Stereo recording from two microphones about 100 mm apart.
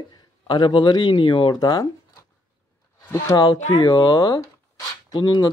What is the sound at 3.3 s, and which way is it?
Speech, 45° left (ahead or behind).